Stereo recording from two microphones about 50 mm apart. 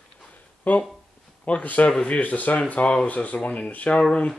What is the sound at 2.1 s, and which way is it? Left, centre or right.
Speech, left.